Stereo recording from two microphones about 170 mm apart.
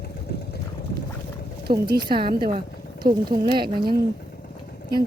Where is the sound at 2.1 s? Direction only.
30° right (ahead or behind).